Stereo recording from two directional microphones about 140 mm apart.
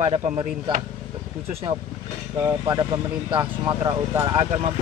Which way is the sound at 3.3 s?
35° right (ahead or behind).